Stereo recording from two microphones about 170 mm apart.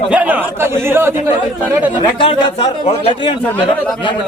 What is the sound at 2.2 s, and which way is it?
A man's voice, 30° left (ahead or behind).